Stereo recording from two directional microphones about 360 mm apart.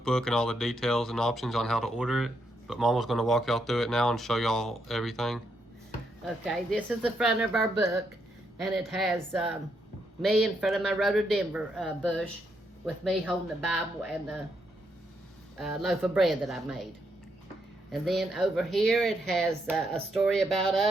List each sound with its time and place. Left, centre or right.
0.0 s speech: centre
15.5 s speech: centre
17.9 s speech: centre